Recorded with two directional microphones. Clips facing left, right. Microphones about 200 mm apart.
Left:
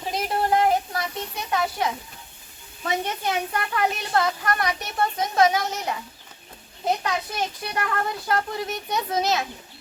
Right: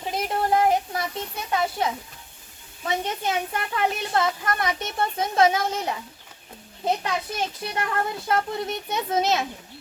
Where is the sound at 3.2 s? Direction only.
25° right (ahead or behind).